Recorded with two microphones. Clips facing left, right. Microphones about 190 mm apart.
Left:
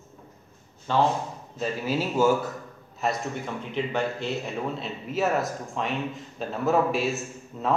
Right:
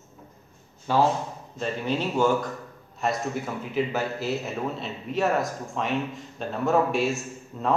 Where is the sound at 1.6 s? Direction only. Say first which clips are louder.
Even; 5° left (ahead or behind).